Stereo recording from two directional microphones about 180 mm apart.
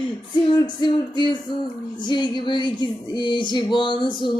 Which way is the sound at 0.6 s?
25° left (ahead or behind).